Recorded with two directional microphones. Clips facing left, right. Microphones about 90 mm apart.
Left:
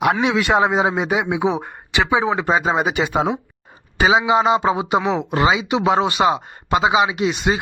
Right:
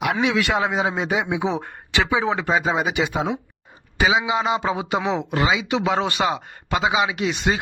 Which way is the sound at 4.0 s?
35° left (ahead or behind).